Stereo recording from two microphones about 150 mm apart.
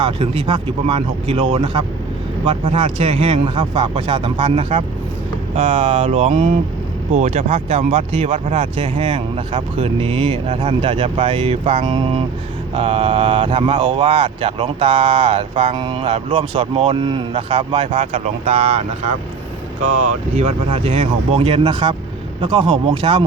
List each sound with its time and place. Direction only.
0.0 s speech: 35° right (ahead or behind)
2.7 s speech: 35° right (ahead or behind)
20.3 s speech: 40° right (ahead or behind)